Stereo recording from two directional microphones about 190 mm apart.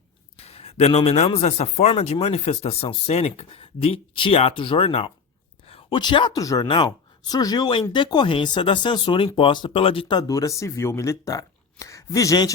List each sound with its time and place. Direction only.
0.3 s a woman's voice: 30° left (ahead or behind)